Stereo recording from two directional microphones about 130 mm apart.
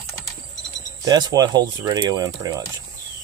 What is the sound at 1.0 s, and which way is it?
Speech, 30° right (ahead or behind).